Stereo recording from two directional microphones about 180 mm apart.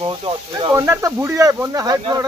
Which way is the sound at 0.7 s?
15° right (ahead or behind).